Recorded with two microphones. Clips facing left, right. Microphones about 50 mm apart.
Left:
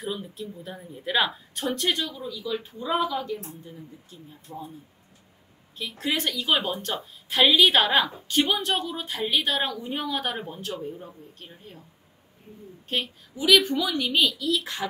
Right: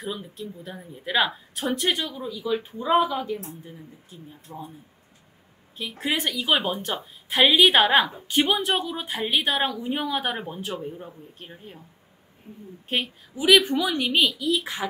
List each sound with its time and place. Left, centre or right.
0.0 s a woman's voice: centre
5.8 s a woman's voice: centre
12.8 s a woman's voice: centre